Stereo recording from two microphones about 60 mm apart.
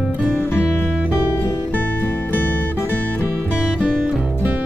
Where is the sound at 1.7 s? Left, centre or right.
Left.